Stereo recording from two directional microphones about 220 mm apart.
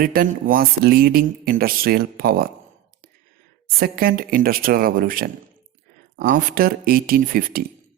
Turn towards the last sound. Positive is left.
turn(degrees=-40)  # may be behind; listen again after turning